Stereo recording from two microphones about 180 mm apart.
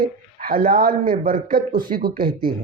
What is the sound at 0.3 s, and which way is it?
A man's voice, 50° right (ahead or behind).